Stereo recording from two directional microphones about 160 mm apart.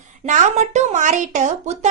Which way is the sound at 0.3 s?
50° right (ahead or behind).